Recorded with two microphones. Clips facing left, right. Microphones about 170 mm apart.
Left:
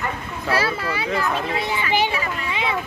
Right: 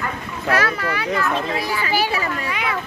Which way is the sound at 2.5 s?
25° left (ahead or behind).